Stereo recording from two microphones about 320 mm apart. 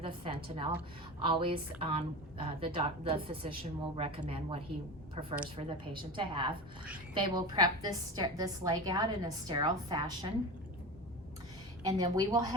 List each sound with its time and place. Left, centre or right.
0.0 s a woman's voice: centre
11.9 s a woman's voice: centre